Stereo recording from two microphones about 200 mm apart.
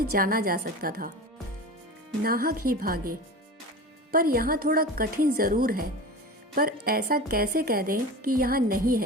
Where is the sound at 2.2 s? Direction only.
50° right (ahead or behind).